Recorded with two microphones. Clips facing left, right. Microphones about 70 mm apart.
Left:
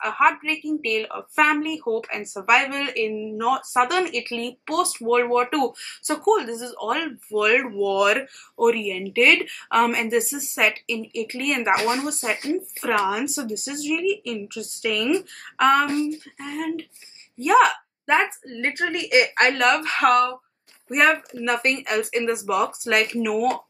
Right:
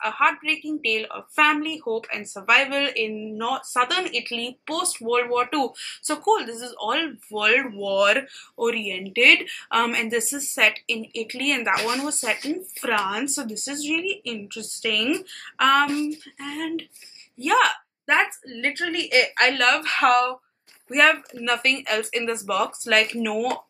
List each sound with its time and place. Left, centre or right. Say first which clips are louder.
0.0 s a woman's voice: left 2 dB; centre
8.8 s a woman's voice: left 1 dB; left
13.1 s a woman's voice: left 2 dB; centre
15.8 s a woman's voice: even; left; by 23.5 s centre